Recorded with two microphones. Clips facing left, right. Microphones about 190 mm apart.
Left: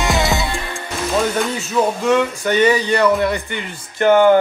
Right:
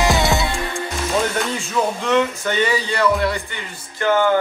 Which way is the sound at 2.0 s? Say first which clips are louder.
Left 2 dB; 15° left (ahead or behind).